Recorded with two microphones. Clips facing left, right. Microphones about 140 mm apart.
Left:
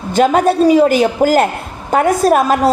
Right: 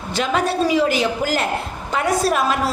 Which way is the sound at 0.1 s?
45° left (ahead or behind).